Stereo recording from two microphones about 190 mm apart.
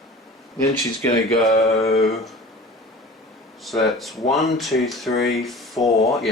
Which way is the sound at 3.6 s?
Centre (ahead or behind).